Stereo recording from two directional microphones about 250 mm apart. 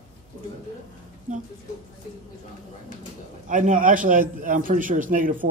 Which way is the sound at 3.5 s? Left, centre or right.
Right.